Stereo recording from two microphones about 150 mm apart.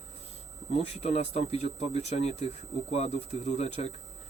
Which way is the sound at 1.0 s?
45° left (ahead or behind).